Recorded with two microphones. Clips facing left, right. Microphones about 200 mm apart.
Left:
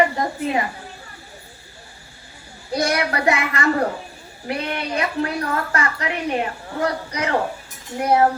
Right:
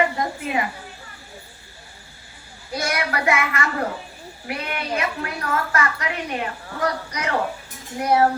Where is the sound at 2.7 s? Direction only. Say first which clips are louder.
Left 4 dB; 35° left (ahead or behind).